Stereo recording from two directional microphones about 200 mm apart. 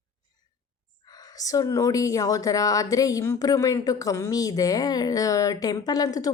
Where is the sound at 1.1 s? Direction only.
20° left (ahead or behind).